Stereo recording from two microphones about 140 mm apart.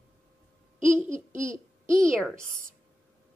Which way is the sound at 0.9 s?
20° right (ahead or behind).